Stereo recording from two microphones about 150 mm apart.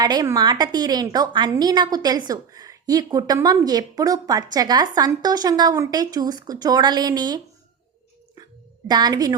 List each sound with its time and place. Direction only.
0.0 s a woman's voice: 25° right (ahead or behind)
8.9 s a woman's voice: 25° right (ahead or behind)